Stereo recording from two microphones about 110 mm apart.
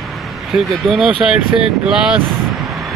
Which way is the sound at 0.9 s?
5° right (ahead or behind).